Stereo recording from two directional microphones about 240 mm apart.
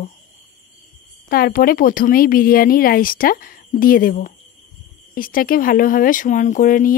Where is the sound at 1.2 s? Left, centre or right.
Left.